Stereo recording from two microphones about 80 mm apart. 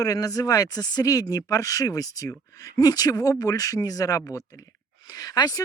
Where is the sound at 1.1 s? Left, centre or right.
Left.